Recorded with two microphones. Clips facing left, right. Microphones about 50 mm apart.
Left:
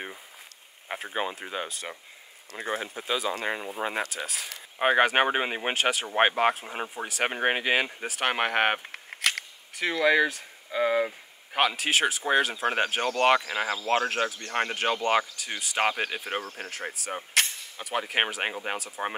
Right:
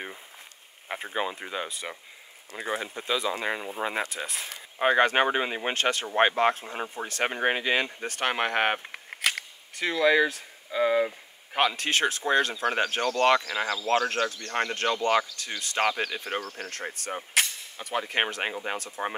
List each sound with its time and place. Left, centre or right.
0.8 s a sound: centre
1.1 s speech: centre
4.7 s speech: centre
8.8 s speech: centre; by 14.0 s left
14.7 s speech: centre
15.8 s speech: left
16.7 s speech: centre